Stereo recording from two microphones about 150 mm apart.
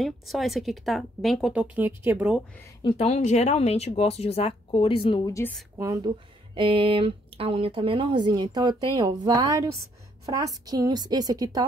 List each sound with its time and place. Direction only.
0.0 s speech: centre (ahead or behind)
3.3 s speech: 45° left (ahead or behind)
5.2 s a woman's voice: 20° left (ahead or behind)
6.0 s a woman's voice: 35° right (ahead or behind)